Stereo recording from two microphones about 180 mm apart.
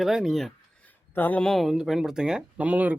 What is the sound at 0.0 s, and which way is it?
Speech, centre (ahead or behind).